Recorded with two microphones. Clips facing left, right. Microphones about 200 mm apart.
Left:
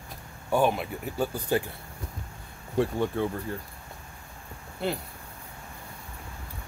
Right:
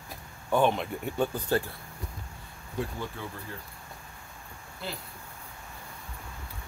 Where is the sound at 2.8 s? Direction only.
60° left (ahead or behind).